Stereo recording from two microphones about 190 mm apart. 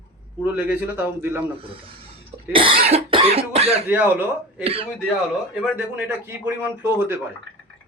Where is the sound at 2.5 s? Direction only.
30° right (ahead or behind).